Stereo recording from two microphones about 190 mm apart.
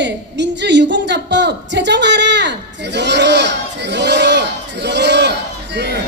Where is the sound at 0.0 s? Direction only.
65° right (ahead or behind).